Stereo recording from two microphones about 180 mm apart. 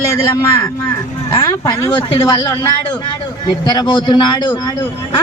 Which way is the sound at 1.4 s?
20° left (ahead or behind).